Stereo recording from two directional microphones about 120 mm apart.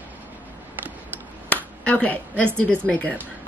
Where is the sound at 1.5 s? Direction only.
10° left (ahead or behind).